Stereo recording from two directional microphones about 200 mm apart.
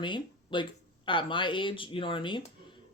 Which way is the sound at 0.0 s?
25° left (ahead or behind).